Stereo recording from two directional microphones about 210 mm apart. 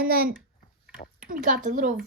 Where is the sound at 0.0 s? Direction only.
45° right (ahead or behind).